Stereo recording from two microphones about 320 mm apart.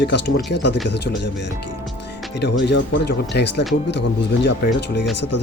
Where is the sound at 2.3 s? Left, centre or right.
Left.